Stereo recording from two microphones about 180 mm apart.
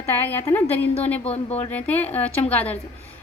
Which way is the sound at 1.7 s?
10° left (ahead or behind).